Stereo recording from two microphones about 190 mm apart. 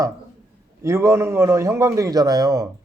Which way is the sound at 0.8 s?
15° right (ahead or behind).